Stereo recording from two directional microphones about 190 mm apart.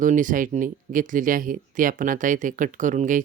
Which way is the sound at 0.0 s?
45° right (ahead or behind).